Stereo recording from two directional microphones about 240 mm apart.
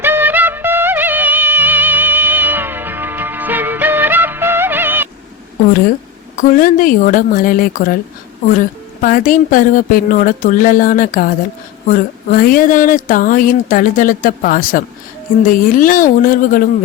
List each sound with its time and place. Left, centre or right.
0.0 s music: centre
6.3 s speech: left